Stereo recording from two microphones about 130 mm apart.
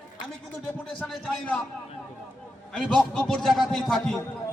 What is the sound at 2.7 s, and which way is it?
A man's voice, 5° left (ahead or behind).